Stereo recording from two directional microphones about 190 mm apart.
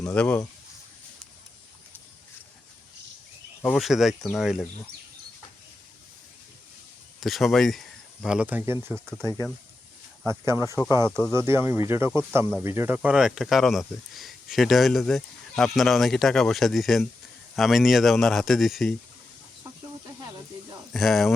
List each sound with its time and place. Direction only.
0.1 s speech: 10° left (ahead or behind)
3.6 s speech: centre (ahead or behind)
7.2 s speech: centre (ahead or behind)
10.5 s speech: 20° left (ahead or behind)
11.3 s speech: 15° right (ahead or behind)
20.9 s speech: centre (ahead or behind)